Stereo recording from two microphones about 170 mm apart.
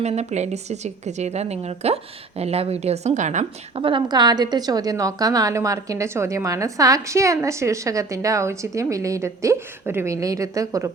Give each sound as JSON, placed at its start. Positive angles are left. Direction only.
{"t": 0.0, "sound": "a woman's voice", "side_deg": -40}
{"t": 3.8, "sound": "a woman's voice", "side_deg": -25}